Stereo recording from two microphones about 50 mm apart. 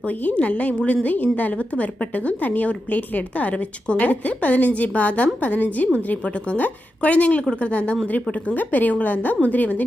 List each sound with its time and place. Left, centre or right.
0.0 s a woman's voice: left